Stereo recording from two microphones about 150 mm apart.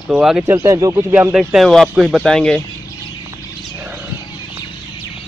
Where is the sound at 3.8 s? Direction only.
10° right (ahead or behind).